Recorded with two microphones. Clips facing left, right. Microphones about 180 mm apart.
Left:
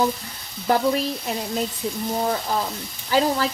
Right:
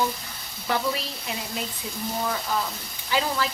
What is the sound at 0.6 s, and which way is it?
Speech, 40° left (ahead or behind).